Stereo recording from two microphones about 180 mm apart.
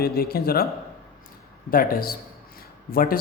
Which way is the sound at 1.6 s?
55° left (ahead or behind).